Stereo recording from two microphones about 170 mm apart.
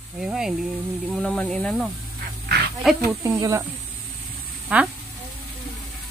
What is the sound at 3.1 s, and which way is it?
Speech, 15° right (ahead or behind).